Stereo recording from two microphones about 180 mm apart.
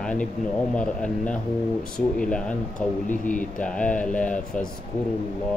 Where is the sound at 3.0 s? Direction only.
45° left (ahead or behind).